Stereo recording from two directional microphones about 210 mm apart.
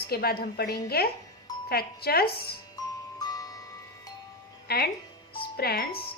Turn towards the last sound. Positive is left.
turn(degrees=45)  # may be behind; listen again after turning